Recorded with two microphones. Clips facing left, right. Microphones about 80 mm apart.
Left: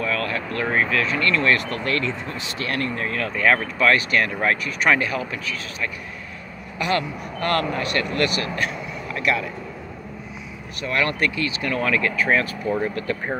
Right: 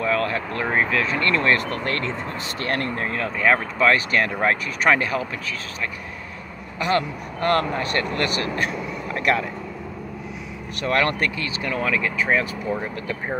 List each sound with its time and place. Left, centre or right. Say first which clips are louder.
0.0 s speech: right 2 dB; right
10.8 s speech: right 1 dB; right
11.6 s speech: left 1 dB; centre